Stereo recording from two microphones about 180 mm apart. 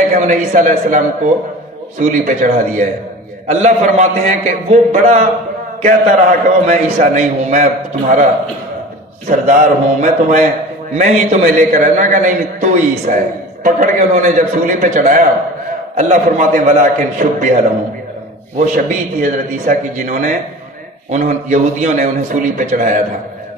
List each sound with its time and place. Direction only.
0.1 s a man's voice: 45° right (ahead or behind)
9.3 s a man's voice: 45° right (ahead or behind)
18.6 s a man's voice: 45° right (ahead or behind)